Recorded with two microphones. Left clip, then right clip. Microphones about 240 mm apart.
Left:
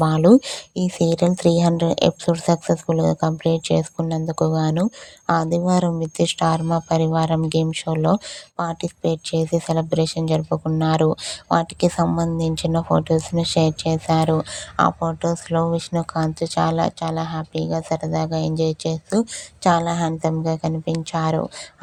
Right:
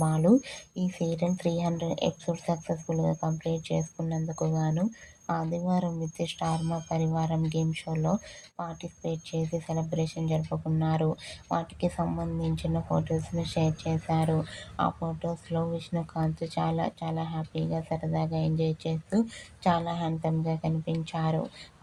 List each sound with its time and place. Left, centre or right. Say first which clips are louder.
0.0 s speech: left 10 dB; left